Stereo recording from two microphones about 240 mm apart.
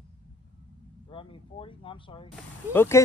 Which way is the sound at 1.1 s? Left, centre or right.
Left.